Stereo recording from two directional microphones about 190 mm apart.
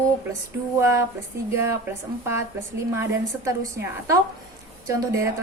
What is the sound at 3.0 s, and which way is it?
A woman's voice, 15° right (ahead or behind).